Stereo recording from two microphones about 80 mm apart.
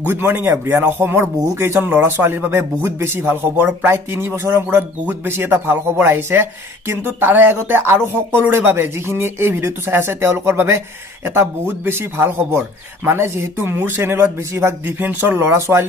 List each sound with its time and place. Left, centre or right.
0.1 s a man's voice: right